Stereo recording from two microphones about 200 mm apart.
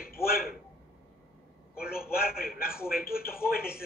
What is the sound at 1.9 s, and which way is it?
A man's voice, 50° left (ahead or behind).